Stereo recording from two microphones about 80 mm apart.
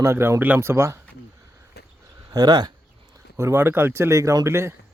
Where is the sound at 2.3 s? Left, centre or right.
Right.